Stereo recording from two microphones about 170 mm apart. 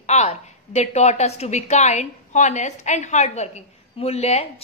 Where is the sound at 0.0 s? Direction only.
40° left (ahead or behind).